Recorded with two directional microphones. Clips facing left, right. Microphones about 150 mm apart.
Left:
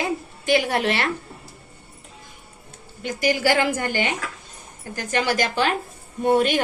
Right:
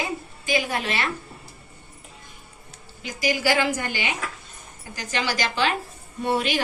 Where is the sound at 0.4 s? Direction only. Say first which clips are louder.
Left 5 dB; 65° left (ahead or behind).